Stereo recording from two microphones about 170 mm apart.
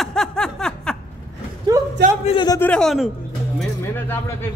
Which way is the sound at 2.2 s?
25° left (ahead or behind).